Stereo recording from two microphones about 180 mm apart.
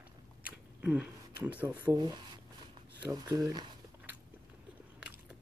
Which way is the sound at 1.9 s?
25° right (ahead or behind).